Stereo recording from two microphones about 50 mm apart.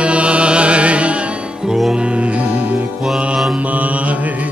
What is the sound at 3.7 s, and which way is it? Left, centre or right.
Mantra, right.